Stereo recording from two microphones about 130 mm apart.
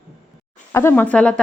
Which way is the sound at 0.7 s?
20° left (ahead or behind).